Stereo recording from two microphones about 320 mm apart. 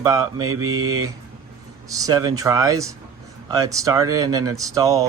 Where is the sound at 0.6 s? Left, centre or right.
Right.